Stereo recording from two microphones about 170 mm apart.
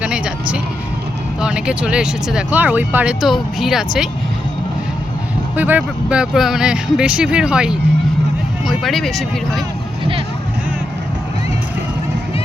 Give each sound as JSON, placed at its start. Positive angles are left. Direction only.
{"t": 0.0, "sound": "music", "side_deg": -5}
{"t": 1.4, "sound": "speech", "side_deg": -5}
{"t": 5.5, "sound": "speech", "side_deg": -10}
{"t": 10.0, "sound": "a sound", "side_deg": -30}